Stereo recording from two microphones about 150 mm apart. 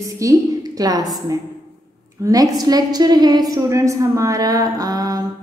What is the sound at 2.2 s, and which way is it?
A woman's voice, 25° right (ahead or behind).